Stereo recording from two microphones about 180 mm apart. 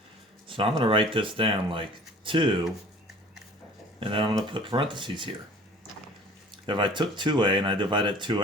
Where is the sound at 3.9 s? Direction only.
30° right (ahead or behind).